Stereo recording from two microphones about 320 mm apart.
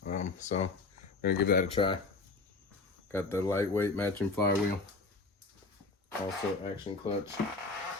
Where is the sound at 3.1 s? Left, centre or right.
Centre.